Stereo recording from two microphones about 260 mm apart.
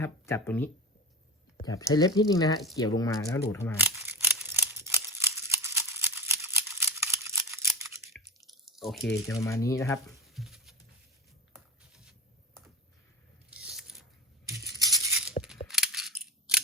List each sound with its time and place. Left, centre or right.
0.0 s speech: centre
3.8 s scissors: centre
8.6 s speech: centre
9.2 s speech: centre
10.2 s patter: centre
13.5 s scissors: centre
15.6 s cap gun: centre